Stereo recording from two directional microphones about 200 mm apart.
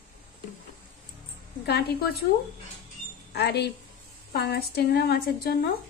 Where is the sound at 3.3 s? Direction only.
55° left (ahead or behind).